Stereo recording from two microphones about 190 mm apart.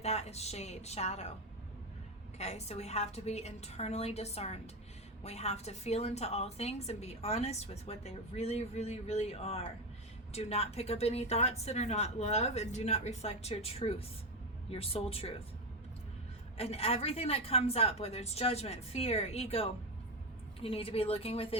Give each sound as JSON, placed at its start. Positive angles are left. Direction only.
{"t": 0.0, "sound": "a woman's voice", "side_deg": 35}
{"t": 2.4, "sound": "a woman's voice", "side_deg": 35}
{"t": 16.6, "sound": "a woman's voice", "side_deg": 30}